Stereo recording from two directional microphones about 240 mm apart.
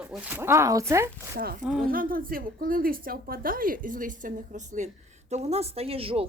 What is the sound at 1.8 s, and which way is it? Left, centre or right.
A woman's voice, right.